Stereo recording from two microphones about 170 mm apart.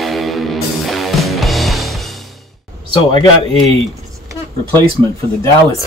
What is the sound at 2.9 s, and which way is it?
Speech, 25° left (ahead or behind).